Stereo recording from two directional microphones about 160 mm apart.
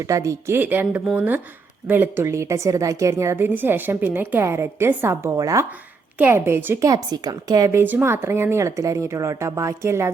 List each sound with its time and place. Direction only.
0.0 s a woman's voice: 20° right (ahead or behind)